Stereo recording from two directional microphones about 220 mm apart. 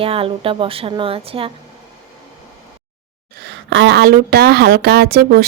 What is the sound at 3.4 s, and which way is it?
A woman's voice, 55° right (ahead or behind).